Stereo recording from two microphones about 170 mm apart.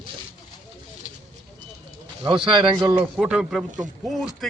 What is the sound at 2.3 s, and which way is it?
Speech, 30° right (ahead or behind).